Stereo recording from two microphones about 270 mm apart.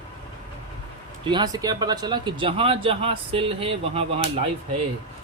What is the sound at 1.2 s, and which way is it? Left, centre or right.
Speech, centre.